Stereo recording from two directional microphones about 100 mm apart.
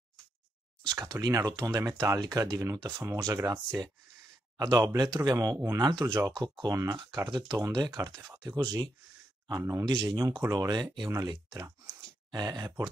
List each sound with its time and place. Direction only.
1.2 s speech: 40° right (ahead or behind)
4.6 s speech: 40° right (ahead or behind)